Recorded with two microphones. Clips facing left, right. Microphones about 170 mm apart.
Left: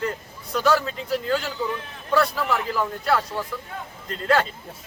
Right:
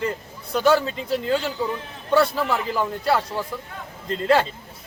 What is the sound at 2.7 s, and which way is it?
Speech, 25° right (ahead or behind).